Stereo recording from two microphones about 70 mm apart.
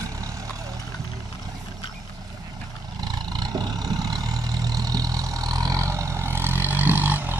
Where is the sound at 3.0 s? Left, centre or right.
Right.